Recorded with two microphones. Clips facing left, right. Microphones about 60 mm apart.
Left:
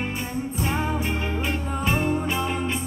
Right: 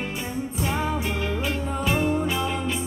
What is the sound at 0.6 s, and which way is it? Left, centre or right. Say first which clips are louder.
Music: even; left.